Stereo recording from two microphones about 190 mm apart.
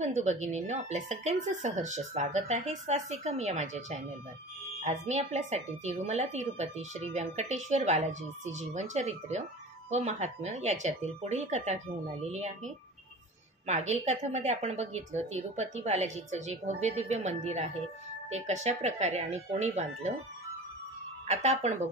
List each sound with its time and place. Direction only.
0.0 s speech: 40° right (ahead or behind)
21.3 s speech: 35° right (ahead or behind)